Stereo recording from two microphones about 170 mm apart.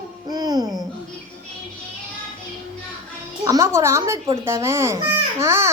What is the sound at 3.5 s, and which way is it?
A child's voice, 15° right (ahead or behind).